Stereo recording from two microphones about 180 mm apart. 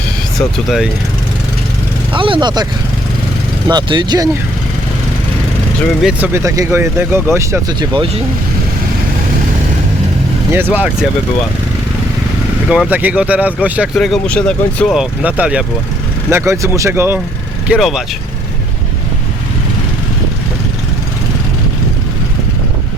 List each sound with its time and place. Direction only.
0.3 s speech: centre (ahead or behind)
2.1 s speech: 30° right (ahead or behind)
3.7 s speech: 25° right (ahead or behind)
6.0 s speech: 5° right (ahead or behind); by 8.2 s 30° right (ahead or behind)
10.5 s speech: 10° right (ahead or behind)
12.6 s speech: 5° right (ahead or behind)
13.9 s speech: 5° left (ahead or behind); by 17.2 s 10° right (ahead or behind)
17.7 s speech: centre (ahead or behind)